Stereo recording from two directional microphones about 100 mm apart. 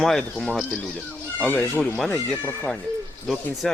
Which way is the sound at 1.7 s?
5° left (ahead or behind).